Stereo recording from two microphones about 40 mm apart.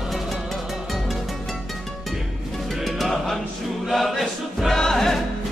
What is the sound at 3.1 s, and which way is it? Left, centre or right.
Choir, centre.